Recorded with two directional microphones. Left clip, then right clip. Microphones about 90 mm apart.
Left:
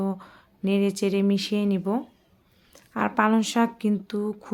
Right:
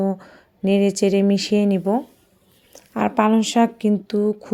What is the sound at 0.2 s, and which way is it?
Speech, 40° right (ahead or behind).